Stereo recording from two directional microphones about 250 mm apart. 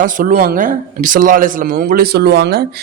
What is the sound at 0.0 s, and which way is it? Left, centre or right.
Speech, right.